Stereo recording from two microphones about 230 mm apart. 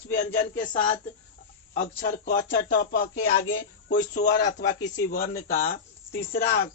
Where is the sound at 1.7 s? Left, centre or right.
Left.